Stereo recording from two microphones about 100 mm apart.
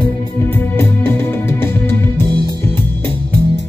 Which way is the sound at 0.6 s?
20° left (ahead or behind).